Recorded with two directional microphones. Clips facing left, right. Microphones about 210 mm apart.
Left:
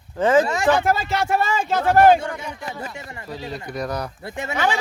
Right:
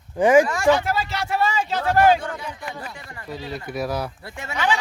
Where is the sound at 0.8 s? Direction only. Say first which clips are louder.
Left 4 dB; 50° left (ahead or behind).